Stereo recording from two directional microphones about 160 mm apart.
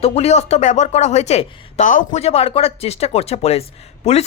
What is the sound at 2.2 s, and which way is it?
A woman's voice, 40° left (ahead or behind).